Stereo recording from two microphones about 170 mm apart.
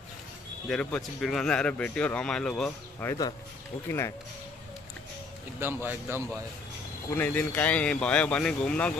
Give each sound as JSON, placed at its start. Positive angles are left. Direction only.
{"t": 0.7, "sound": "a man's voice", "side_deg": 5}
{"t": 3.1, "sound": "speech", "side_deg": 20}
{"t": 5.6, "sound": "speech", "side_deg": -10}
{"t": 7.2, "sound": "speech", "side_deg": 10}